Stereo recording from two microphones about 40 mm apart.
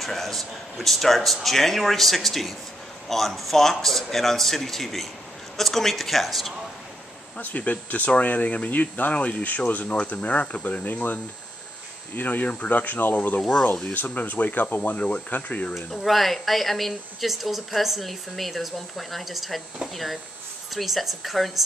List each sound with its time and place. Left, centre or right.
0.0 s speech: centre
7.3 s speech: left
12.2 s speech: left
13.4 s speech: centre
13.9 s speech: left
15.7 s speech: centre